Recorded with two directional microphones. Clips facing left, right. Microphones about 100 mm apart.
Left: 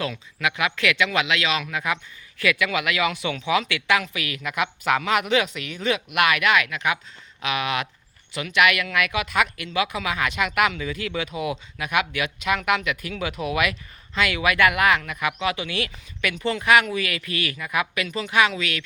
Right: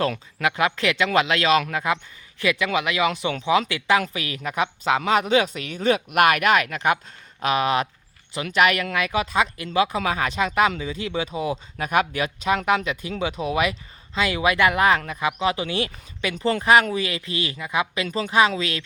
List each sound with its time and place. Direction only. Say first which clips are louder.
0.3 s speech: right 2 dB; 35° right (ahead or behind)
2.4 s speech: right 1 dB; 30° right (ahead or behind)